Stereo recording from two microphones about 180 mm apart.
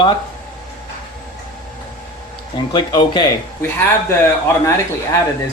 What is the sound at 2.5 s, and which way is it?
Speech, 25° left (ahead or behind).